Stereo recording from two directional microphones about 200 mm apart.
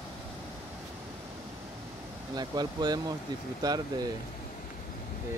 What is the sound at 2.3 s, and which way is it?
Speech, 20° right (ahead or behind).